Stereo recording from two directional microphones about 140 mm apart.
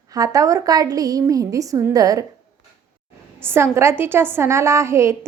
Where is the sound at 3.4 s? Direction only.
15° right (ahead or behind).